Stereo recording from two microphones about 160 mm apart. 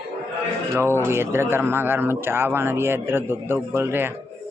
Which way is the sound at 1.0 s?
15° right (ahead or behind).